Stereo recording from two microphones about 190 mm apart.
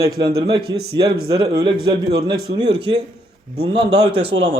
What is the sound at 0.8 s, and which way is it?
Speech, 55° right (ahead or behind).